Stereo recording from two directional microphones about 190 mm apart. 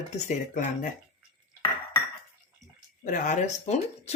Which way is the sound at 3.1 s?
40° left (ahead or behind).